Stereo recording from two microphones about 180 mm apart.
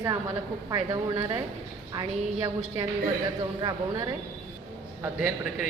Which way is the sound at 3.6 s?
25° right (ahead or behind).